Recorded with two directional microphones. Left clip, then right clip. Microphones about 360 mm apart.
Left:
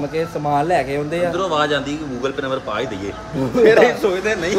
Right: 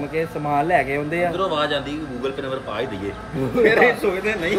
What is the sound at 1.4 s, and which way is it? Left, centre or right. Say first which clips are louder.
Speech: left 3 dB; centre.